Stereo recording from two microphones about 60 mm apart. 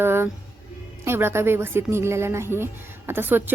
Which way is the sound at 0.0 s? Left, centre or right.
Right.